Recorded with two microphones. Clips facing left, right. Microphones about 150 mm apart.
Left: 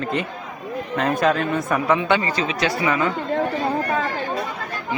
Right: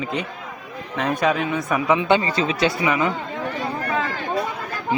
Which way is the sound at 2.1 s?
25° right (ahead or behind).